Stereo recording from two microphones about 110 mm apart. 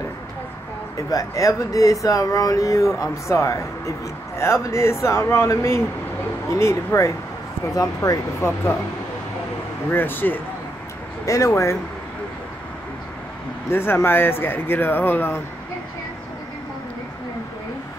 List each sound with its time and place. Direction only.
0.9 s speech: 30° left (ahead or behind)
9.8 s speech: 20° left (ahead or behind)
11.2 s speech: 30° left (ahead or behind)
13.7 s speech: 20° left (ahead or behind)